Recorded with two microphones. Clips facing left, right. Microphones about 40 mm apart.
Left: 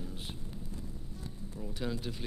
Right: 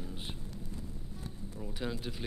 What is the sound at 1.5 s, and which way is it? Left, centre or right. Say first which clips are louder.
Speech: left 1 dB; centre.